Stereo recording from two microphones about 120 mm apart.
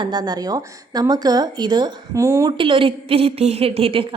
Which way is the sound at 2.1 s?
25° right (ahead or behind).